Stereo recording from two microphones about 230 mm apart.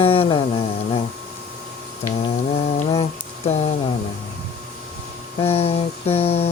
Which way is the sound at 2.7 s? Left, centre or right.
Left.